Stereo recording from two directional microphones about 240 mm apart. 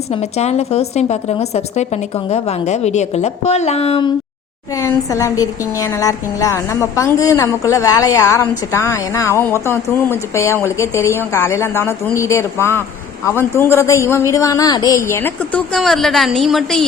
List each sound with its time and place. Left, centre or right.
0.1 s a woman's voice: left
4.7 s a woman's voice: centre